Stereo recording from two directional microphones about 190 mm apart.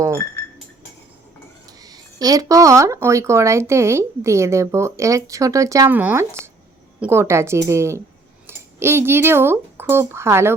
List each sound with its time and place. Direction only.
1.8 s speech: 20° right (ahead or behind)